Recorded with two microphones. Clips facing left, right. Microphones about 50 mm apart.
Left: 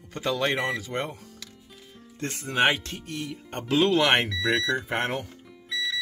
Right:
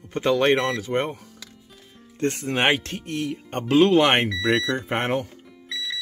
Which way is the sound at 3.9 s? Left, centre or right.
Right.